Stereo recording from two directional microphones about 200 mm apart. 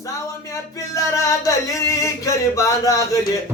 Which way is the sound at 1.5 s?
15° left (ahead or behind).